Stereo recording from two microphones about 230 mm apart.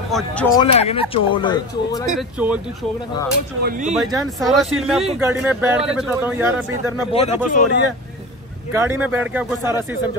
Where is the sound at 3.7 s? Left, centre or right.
Right.